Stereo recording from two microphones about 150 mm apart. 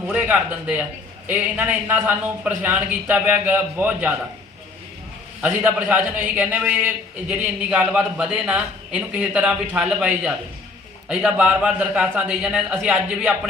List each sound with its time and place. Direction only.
0.1 s a man's voice: 10° right (ahead or behind)
5.4 s a man's voice: 10° right (ahead or behind)